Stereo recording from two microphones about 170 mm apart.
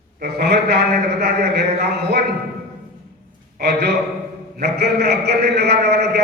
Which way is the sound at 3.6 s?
70° right (ahead or behind).